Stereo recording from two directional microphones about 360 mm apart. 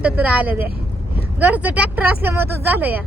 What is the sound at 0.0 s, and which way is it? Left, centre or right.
Speech, centre.